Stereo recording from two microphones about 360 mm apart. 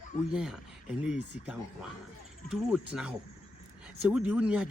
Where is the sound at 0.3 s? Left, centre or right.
Centre.